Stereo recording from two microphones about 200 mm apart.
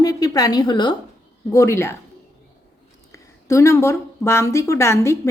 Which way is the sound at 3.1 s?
15° left (ahead or behind).